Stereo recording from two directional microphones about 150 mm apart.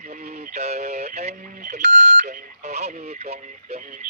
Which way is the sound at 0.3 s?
50° right (ahead or behind).